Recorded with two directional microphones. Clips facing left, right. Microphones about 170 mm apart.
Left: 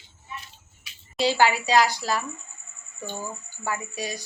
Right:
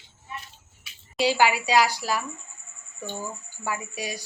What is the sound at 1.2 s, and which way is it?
Speech, 10° right (ahead or behind).